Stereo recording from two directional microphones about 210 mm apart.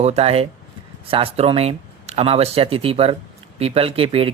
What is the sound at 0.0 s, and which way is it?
Speech, 30° right (ahead or behind).